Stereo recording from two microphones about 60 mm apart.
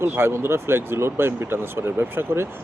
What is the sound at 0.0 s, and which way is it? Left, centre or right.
Speech, right.